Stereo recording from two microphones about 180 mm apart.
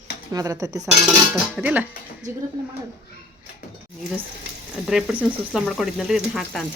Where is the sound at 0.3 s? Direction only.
20° right (ahead or behind).